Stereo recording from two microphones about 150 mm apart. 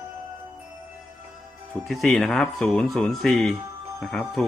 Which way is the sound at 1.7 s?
Centre (ahead or behind).